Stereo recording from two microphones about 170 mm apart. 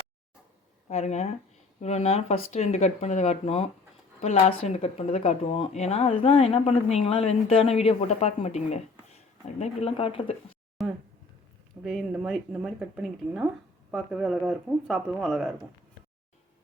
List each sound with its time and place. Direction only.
0.9 s speech: 40° left (ahead or behind)
10.8 s a sound: centre (ahead or behind)
11.8 s speech: centre (ahead or behind)